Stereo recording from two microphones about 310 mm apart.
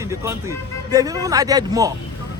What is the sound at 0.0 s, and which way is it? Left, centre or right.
Speech, centre.